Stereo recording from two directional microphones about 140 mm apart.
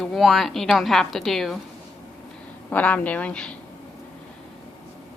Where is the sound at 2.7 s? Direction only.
10° left (ahead or behind).